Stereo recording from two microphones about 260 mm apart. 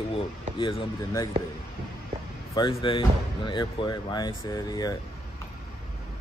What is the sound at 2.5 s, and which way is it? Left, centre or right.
Speech, centre.